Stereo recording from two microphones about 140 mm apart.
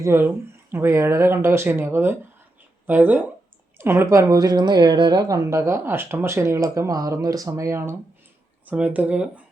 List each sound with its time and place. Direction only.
0.0 s a woman's voice: 15° right (ahead or behind)